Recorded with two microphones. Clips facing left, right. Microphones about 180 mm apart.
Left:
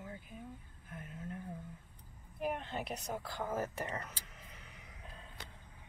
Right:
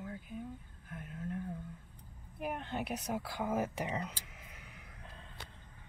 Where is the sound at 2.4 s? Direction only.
Centre (ahead or behind).